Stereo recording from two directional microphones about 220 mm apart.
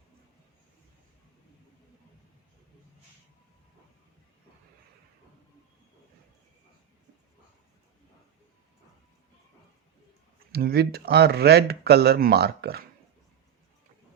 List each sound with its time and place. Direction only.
10.5 s speech: 45° right (ahead or behind)